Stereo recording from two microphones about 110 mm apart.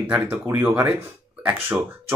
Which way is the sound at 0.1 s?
15° right (ahead or behind).